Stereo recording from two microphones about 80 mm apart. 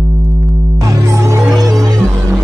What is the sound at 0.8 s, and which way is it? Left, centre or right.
Music, right.